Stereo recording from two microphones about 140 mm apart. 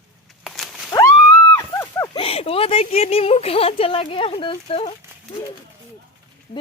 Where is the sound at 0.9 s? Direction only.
20° left (ahead or behind).